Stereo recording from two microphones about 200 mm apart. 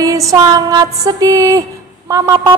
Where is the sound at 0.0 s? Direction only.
15° right (ahead or behind).